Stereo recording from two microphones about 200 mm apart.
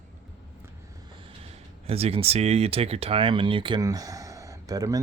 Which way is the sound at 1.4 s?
30° right (ahead or behind).